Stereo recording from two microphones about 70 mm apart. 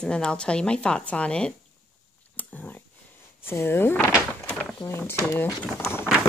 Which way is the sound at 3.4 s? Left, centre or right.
Left.